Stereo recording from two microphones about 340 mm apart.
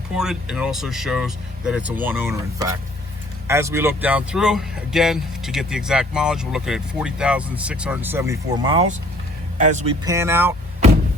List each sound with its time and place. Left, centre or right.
0.2 s speech: centre; by 10.1 s right
10.1 s speech: centre